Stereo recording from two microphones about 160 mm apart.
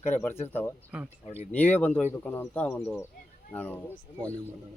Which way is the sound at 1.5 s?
10° left (ahead or behind).